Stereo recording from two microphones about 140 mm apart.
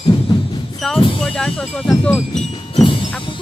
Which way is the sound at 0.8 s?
5° left (ahead or behind).